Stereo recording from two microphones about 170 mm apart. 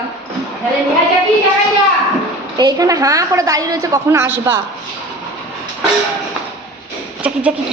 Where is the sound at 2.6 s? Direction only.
20° right (ahead or behind).